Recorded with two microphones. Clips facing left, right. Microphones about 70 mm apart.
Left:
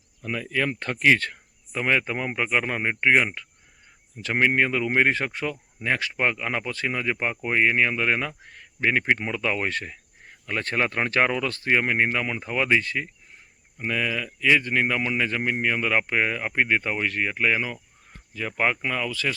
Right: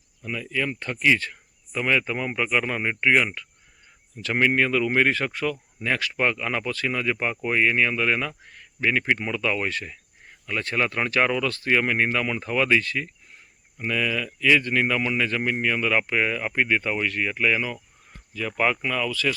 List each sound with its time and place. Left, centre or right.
0.2 s speech: left
1.7 s speech: left